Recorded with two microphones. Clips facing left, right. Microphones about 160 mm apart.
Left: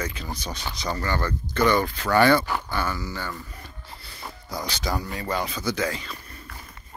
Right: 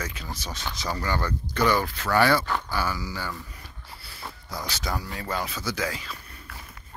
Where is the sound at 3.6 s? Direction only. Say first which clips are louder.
Left 2 dB; 5° right (ahead or behind).